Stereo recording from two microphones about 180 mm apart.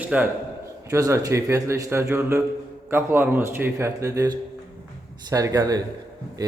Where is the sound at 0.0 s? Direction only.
10° right (ahead or behind).